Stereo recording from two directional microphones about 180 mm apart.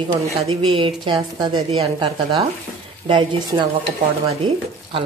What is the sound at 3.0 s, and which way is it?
Speech, 25° right (ahead or behind).